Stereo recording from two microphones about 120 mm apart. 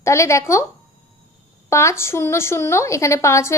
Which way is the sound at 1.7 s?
25° left (ahead or behind).